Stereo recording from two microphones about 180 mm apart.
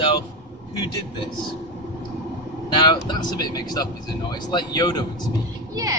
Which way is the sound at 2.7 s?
25° left (ahead or behind).